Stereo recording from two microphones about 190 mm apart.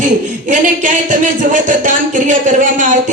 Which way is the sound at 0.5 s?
40° right (ahead or behind).